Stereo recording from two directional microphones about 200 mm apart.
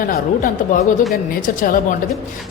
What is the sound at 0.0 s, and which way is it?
A woman's voice, 45° left (ahead or behind).